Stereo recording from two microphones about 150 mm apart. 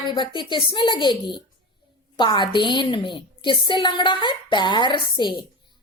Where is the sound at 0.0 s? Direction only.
30° left (ahead or behind).